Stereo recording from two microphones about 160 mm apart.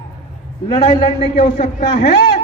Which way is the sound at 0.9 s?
40° left (ahead or behind).